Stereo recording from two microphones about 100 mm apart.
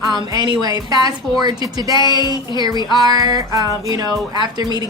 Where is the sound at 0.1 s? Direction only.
45° right (ahead or behind).